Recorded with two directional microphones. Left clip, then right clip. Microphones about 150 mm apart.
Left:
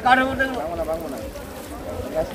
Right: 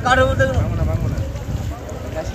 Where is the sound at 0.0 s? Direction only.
60° right (ahead or behind).